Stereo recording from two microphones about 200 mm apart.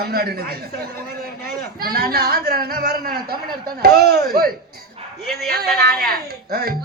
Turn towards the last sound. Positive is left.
turn(degrees=-50)  # may be behind; listen again after turning